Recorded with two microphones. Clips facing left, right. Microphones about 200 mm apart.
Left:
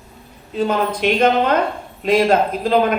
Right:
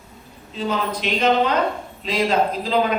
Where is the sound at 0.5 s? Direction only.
55° left (ahead or behind).